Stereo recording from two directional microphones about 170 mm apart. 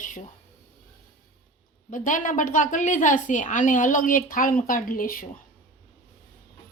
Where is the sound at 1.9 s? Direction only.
50° left (ahead or behind).